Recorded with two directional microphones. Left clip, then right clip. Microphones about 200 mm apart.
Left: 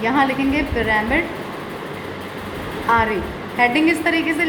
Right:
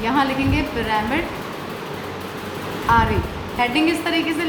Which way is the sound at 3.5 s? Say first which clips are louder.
Left 3 dB; 10° left (ahead or behind).